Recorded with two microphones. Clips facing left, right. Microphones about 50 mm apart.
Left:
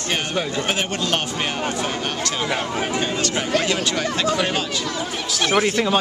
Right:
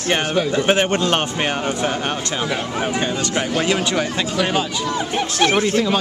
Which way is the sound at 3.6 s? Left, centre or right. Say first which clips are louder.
Right 3 dB; centre.